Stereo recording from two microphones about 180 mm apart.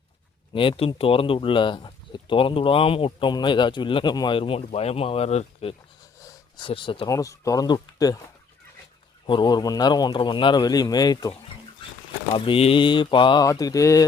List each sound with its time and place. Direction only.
0.5 s speech: 30° left (ahead or behind)
9.2 s speech: 25° left (ahead or behind)